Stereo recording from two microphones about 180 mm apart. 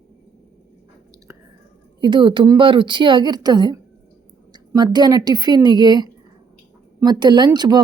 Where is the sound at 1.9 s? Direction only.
25° right (ahead or behind).